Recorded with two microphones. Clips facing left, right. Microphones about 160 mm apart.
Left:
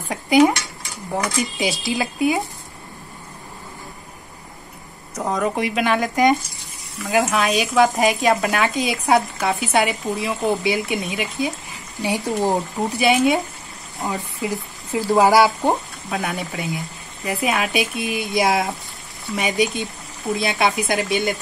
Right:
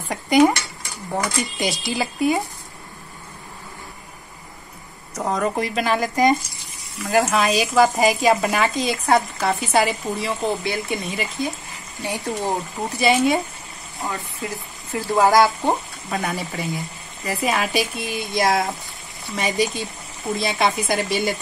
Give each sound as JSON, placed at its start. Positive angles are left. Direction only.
{"t": 0.1, "sound": "dishes", "side_deg": 0}
{"t": 1.1, "sound": "speech", "side_deg": 0}
{"t": 5.1, "sound": "speech", "side_deg": 0}
{"t": 12.0, "sound": "speech", "side_deg": 20}
{"t": 12.7, "sound": "speech", "side_deg": 0}
{"t": 14.0, "sound": "speech", "side_deg": 20}
{"t": 15.2, "sound": "speech", "side_deg": 0}